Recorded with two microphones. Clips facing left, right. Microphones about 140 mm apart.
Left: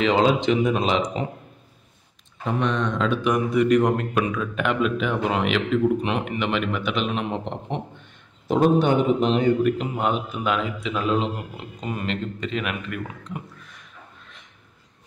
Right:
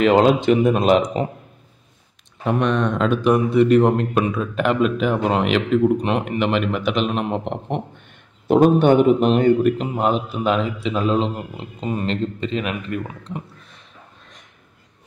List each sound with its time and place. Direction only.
0.0 s speech: 50° right (ahead or behind)
2.4 s a man's voice: 60° right (ahead or behind)
3.2 s a man's voice: 30° right (ahead or behind)
8.5 s a man's voice: 55° right (ahead or behind)
9.8 s a man's voice: 35° right (ahead or behind)